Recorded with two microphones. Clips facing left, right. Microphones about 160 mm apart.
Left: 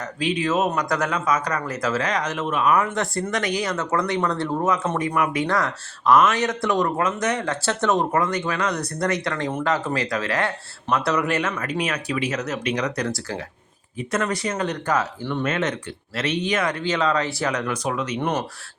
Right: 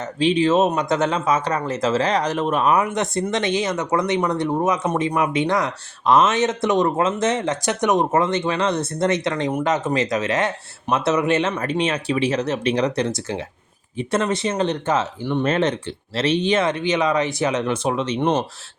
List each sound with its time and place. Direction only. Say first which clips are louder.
0.0 s speech: right 6 dB; 30° right (ahead or behind)
2.7 s speech: right 2 dB; 20° right (ahead or behind)
15.4 s speech: right 5 dB; 30° right (ahead or behind)